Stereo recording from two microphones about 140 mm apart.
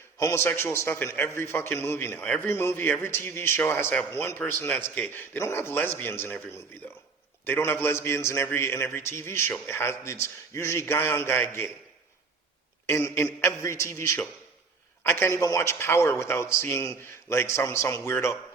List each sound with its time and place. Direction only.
0.2 s a man's voice: 20° left (ahead or behind)
12.9 s a man's voice: 20° left (ahead or behind)